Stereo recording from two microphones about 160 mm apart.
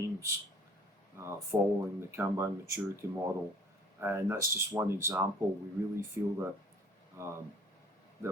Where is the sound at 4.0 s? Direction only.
15° right (ahead or behind).